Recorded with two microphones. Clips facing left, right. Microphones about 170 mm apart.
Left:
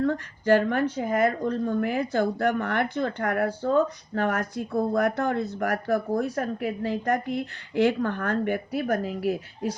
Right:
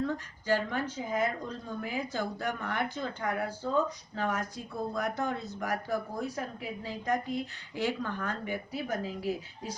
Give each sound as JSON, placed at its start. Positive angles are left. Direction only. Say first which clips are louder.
{"t": 0.0, "sound": "speech", "louder": "left 8 dB", "side_deg": 65}